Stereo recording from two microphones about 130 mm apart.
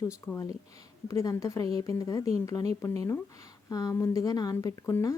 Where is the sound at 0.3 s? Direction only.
25° left (ahead or behind).